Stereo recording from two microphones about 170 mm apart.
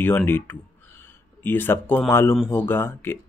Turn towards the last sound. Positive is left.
turn(degrees=15)  # may be behind; listen again after turning